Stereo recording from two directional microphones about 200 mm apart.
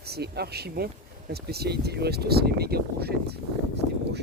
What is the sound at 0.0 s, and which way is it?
Speech, 55° right (ahead or behind).